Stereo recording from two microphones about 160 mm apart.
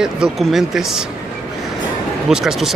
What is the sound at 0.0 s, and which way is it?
Speech, 5° right (ahead or behind).